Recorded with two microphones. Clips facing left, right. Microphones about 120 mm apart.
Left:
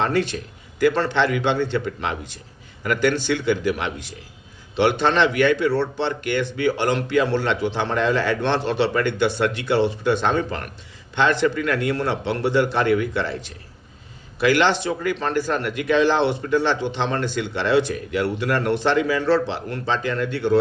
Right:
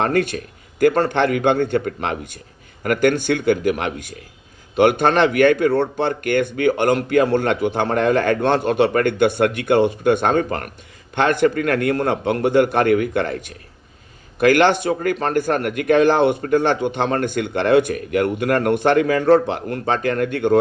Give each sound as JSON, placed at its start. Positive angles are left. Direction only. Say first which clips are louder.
{"t": 0.0, "sound": "a man's voice", "louder": "right 3 dB", "side_deg": -50}